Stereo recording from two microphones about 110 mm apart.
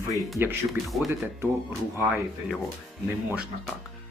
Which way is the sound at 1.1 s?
20° right (ahead or behind).